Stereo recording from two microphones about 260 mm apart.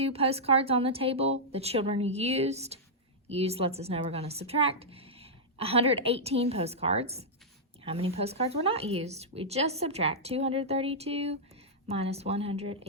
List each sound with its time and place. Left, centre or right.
0.0 s speech: right